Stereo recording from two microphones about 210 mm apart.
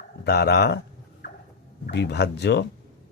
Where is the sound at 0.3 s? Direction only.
50° left (ahead or behind).